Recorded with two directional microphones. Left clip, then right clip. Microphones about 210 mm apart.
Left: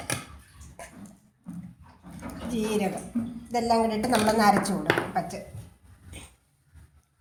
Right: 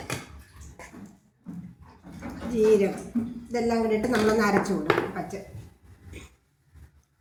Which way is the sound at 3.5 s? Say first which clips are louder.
Left 1 dB; 45° left (ahead or behind).